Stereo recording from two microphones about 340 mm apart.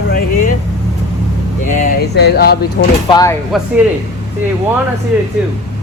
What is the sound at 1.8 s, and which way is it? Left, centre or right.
Speech, left.